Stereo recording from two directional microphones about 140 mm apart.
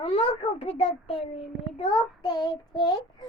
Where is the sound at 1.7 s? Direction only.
40° left (ahead or behind).